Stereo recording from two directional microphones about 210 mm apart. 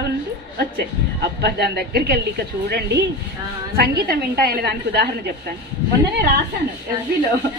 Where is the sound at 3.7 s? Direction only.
50° right (ahead or behind).